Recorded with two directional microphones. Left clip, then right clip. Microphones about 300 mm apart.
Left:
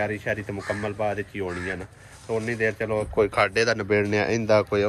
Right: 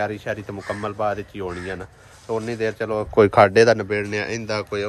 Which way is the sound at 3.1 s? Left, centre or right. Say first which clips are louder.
Right 9 dB; right.